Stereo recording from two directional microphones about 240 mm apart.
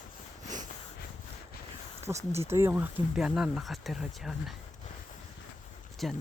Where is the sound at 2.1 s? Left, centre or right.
Right.